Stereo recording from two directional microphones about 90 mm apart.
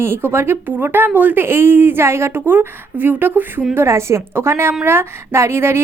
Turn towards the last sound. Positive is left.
turn(degrees=-30)  # may be behind; listen again after turning